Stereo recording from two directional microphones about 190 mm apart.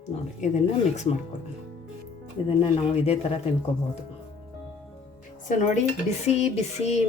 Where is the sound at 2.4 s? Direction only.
30° left (ahead or behind).